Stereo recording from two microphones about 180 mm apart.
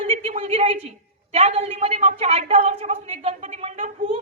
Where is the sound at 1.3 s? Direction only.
35° right (ahead or behind).